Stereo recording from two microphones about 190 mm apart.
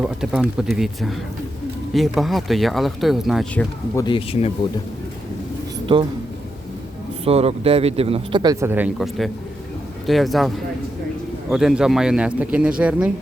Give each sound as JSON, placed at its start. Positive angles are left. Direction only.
{"t": 0.0, "sound": "speech", "side_deg": -5}
{"t": 3.9, "sound": "speech", "side_deg": 25}
{"t": 5.8, "sound": "speech", "side_deg": -25}
{"t": 7.3, "sound": "speech", "side_deg": -30}
{"t": 8.6, "sound": "speech", "side_deg": -10}
{"t": 11.5, "sound": "speech", "side_deg": -5}